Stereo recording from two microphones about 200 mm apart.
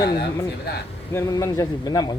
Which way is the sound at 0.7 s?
55° left (ahead or behind).